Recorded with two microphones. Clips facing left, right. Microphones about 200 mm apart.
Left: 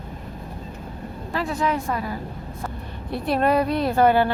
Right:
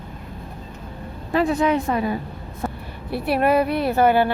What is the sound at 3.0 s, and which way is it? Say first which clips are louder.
A woman's voice: right 2 dB; 5° right (ahead or behind).